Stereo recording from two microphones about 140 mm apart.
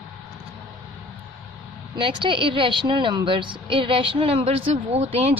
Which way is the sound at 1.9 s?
35° right (ahead or behind).